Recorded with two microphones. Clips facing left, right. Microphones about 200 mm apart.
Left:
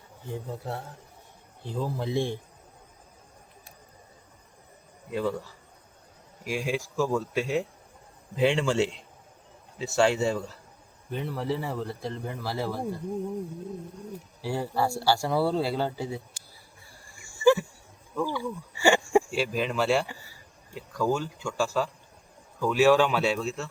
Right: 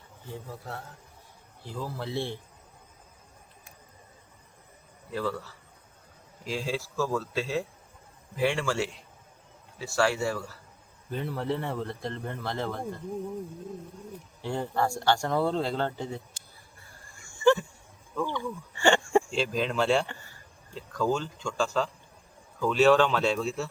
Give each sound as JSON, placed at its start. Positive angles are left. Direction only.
{"t": 0.3, "sound": "speech", "side_deg": 20}
{"t": 5.1, "sound": "speech", "side_deg": 15}
{"t": 11.1, "sound": "speech", "side_deg": 0}
{"t": 14.4, "sound": "speech", "side_deg": 5}
{"t": 17.1, "sound": "a sound", "side_deg": 10}
{"t": 18.1, "sound": "speech", "side_deg": 5}